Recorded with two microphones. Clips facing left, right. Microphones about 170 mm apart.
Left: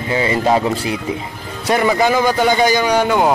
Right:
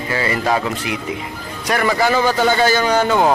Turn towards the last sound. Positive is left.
turn(degrees=10)  # may be behind; listen again after turning